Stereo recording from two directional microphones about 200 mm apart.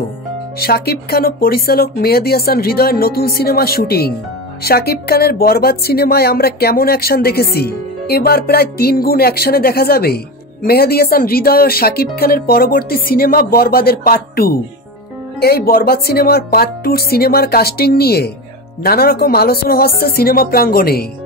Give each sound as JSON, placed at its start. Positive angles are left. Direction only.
{"t": 0.6, "sound": "speech", "side_deg": 50}